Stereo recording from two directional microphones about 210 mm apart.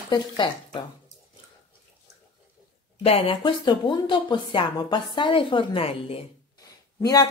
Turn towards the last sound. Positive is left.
turn(degrees=15)  # may be behind; listen again after turning